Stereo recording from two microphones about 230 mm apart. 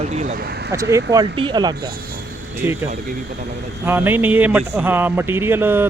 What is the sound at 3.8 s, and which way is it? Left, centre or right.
Speech, centre.